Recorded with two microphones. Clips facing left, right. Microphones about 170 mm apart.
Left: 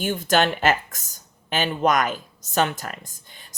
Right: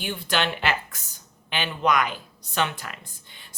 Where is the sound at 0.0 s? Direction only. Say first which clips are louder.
Left 6 dB; 45° left (ahead or behind).